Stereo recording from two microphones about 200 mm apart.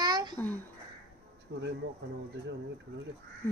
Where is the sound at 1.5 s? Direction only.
65° right (ahead or behind).